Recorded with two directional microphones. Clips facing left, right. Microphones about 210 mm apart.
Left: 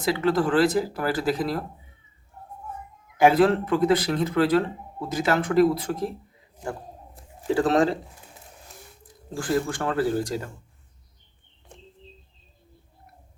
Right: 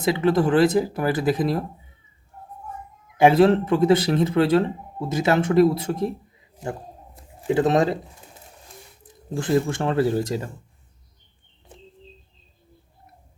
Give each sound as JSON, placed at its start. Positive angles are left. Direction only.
{"t": 0.0, "sound": "speech", "side_deg": -20}
{"t": 3.2, "sound": "speech", "side_deg": -25}
{"t": 7.4, "sound": "speech", "side_deg": -20}
{"t": 9.0, "sound": "speech", "side_deg": -20}